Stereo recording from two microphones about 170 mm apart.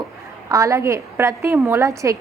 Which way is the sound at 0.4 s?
20° right (ahead or behind).